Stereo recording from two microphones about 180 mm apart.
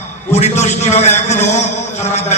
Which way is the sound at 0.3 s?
40° left (ahead or behind).